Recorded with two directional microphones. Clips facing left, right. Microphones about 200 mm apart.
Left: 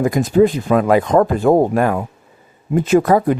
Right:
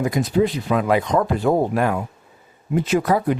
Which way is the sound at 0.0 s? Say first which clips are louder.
Left 6 dB; 50° left (ahead or behind).